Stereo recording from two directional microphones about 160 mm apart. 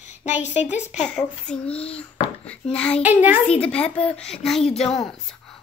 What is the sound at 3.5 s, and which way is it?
A child's voice, 10° left (ahead or behind).